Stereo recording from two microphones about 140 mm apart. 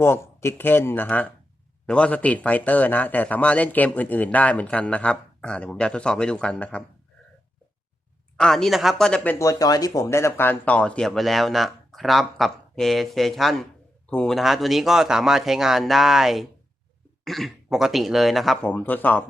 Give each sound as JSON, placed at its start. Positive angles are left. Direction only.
{"t": 0.0, "sound": "a man's voice", "side_deg": 20}
{"t": 8.4, "sound": "speech", "side_deg": 0}